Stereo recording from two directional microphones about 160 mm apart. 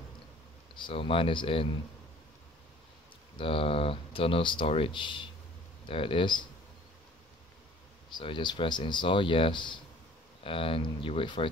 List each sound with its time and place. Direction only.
0.7 s speech: 30° left (ahead or behind)
3.3 s speech: 35° left (ahead or behind)
8.1 s speech: 30° left (ahead or behind)